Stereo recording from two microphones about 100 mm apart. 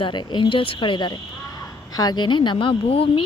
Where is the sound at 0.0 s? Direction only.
50° left (ahead or behind).